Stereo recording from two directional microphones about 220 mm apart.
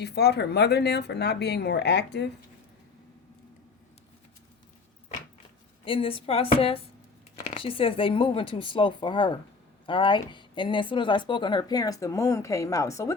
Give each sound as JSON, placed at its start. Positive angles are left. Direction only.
{"t": 0.0, "sound": "speech", "side_deg": 50}
{"t": 5.8, "sound": "speech", "side_deg": 25}